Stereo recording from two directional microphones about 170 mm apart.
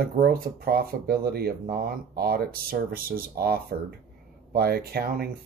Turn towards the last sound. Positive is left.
turn(degrees=-65)  # may be behind; listen again after turning